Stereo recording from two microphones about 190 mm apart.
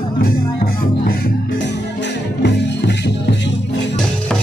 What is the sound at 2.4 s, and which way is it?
Music, 65° left (ahead or behind).